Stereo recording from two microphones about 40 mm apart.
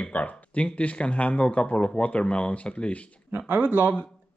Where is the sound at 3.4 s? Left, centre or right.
Right.